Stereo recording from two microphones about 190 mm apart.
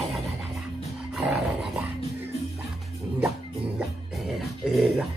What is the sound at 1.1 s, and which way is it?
Dog, 5° right (ahead or behind).